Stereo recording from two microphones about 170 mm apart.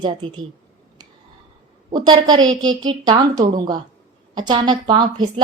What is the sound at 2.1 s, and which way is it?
A woman's voice, 25° right (ahead or behind).